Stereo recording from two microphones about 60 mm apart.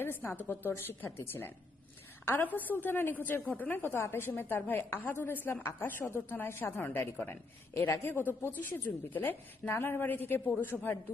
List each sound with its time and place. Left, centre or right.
0.0 s a woman's voice: left
2.6 s a woman's voice: left
8.0 s a woman's voice: left